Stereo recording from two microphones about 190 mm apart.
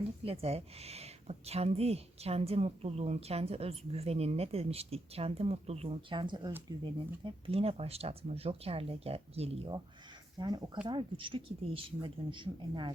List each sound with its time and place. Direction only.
0.3 s a woman's voice: 30° right (ahead or behind)